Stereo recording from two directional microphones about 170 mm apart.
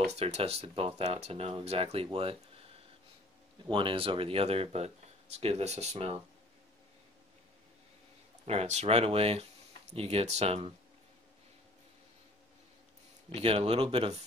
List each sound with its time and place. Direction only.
0.0 s speech: 40° right (ahead or behind)
3.6 s speech: 30° right (ahead or behind)
8.5 s speech: 40° right (ahead or behind)
13.3 s speech: 35° right (ahead or behind)